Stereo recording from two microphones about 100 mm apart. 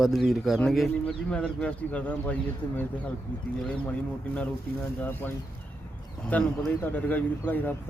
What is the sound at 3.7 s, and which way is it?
Speech, 15° left (ahead or behind).